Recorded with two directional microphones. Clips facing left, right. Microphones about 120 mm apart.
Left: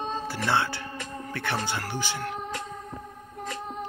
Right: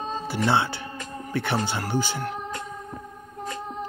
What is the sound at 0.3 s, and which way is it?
Speech, 20° right (ahead or behind).